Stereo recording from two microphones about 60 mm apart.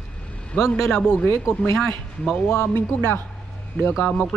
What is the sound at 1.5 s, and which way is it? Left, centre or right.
A man's voice, left.